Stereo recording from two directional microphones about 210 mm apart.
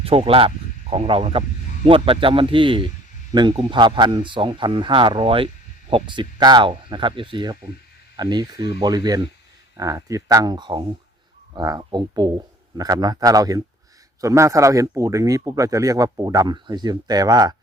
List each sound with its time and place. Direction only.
0.0 s speech: 25° right (ahead or behind)